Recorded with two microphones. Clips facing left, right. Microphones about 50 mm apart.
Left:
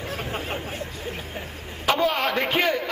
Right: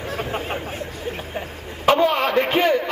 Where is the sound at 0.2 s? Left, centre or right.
Centre.